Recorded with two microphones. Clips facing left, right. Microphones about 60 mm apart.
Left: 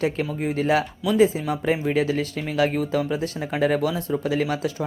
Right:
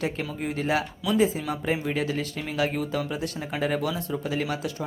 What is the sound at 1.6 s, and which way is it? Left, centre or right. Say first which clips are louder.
Speech: left 6 dB; left.